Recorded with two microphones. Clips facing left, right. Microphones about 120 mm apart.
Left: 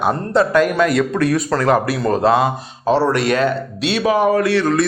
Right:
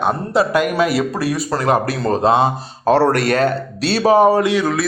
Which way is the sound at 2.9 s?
55° right (ahead or behind).